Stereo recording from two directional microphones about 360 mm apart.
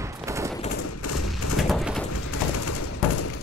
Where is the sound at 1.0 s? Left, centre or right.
Left.